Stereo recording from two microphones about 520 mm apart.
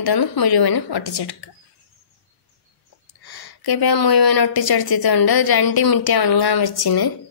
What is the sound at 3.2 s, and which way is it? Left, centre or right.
A woman's voice, left.